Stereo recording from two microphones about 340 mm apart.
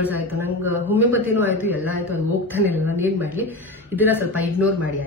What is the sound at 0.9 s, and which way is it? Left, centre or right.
Speech, centre.